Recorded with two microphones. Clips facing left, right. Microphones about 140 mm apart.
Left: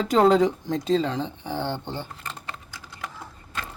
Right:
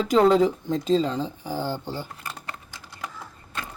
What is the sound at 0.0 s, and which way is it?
Speech, 30° left (ahead or behind).